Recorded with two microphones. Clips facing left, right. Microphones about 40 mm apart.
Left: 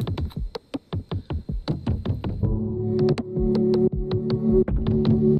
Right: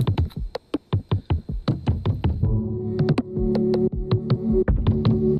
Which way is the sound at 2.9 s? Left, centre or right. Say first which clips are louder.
Left 1 dB; centre.